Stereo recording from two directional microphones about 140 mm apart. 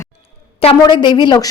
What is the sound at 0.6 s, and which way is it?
Speech, 40° left (ahead or behind).